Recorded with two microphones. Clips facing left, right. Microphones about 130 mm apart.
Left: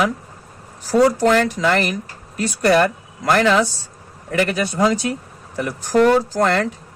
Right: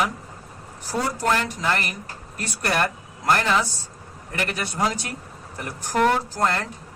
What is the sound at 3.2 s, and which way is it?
Speech, 90° left.